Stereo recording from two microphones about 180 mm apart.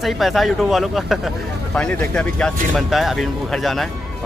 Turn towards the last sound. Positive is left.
turn(degrees=0)  # may be behind; listen again after turning